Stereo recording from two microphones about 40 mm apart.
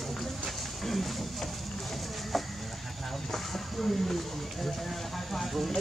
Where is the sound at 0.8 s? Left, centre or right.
Centre.